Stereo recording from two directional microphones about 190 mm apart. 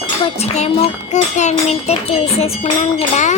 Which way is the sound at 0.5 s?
35° left (ahead or behind).